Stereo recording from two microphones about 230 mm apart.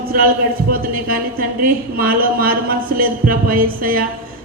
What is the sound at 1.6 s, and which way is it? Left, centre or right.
Speech, right.